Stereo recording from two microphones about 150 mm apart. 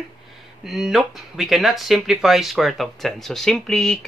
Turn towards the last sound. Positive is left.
turn(degrees=5)  # may be behind; listen again after turning